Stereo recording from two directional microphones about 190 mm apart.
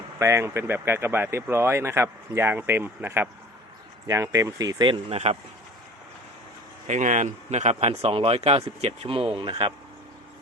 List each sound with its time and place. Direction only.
0.2 s speech: 15° right (ahead or behind); by 5.4 s 35° right (ahead or behind)
6.8 s speech: 40° right (ahead or behind)